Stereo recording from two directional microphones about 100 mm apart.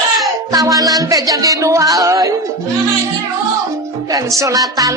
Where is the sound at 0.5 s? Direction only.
35° right (ahead or behind).